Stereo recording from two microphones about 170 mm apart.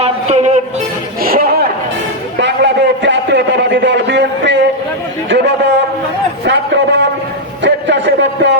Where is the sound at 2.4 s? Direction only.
90° right.